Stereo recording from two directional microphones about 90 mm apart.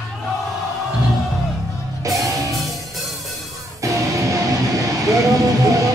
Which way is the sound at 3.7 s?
40° right (ahead or behind).